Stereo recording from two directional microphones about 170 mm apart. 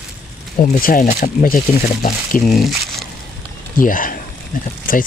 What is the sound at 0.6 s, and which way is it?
Speech, 55° left (ahead or behind).